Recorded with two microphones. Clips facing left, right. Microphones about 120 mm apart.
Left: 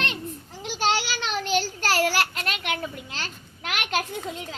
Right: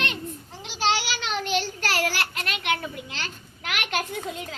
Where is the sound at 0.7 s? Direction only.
40° left (ahead or behind).